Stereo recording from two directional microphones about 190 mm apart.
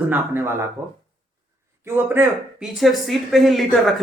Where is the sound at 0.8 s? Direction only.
15° right (ahead or behind).